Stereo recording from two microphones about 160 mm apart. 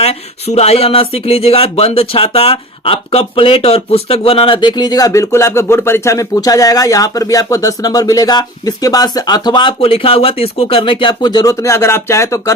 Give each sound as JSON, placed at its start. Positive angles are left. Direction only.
{"t": 0.0, "sound": "speech", "side_deg": 40}